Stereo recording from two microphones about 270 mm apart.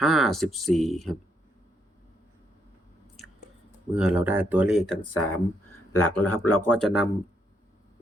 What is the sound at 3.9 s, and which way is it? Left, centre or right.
Speech, centre.